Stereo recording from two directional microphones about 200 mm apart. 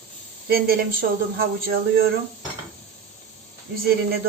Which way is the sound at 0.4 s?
50° right (ahead or behind).